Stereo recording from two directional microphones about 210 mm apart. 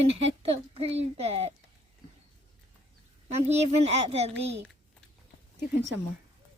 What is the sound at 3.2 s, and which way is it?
Speech, 30° right (ahead or behind).